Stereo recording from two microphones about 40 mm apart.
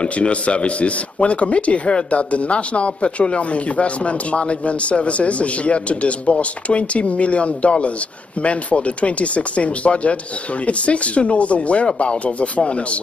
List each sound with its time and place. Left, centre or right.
0.0 s speech: left